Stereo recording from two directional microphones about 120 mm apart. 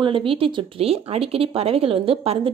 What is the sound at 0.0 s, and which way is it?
A woman's voice, 45° right (ahead or behind).